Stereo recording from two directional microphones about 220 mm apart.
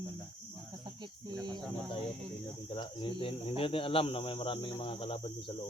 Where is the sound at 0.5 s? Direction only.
20° right (ahead or behind).